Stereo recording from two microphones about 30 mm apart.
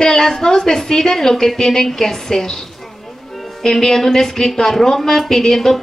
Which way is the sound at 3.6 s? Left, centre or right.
Centre.